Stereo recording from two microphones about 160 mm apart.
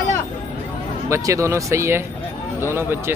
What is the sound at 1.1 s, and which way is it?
Speech, 20° right (ahead or behind).